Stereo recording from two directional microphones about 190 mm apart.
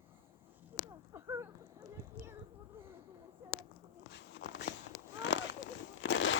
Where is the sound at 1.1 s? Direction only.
15° right (ahead or behind).